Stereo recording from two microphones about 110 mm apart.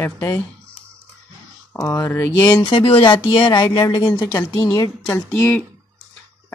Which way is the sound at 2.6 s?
50° left (ahead or behind).